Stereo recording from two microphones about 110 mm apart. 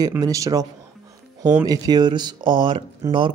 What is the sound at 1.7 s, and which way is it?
Speech, 40° right (ahead or behind).